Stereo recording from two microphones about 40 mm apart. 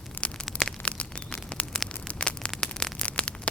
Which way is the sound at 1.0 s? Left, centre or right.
Left.